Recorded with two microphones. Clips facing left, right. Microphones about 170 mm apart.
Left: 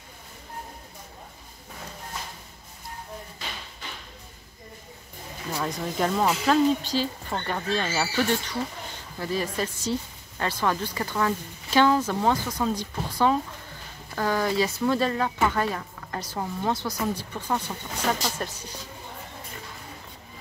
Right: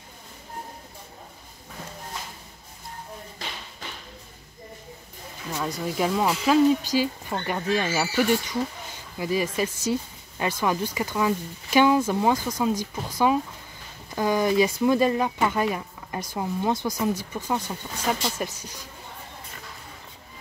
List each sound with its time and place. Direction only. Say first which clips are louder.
5.6 s speech: right 1 dB; 5° right (ahead or behind)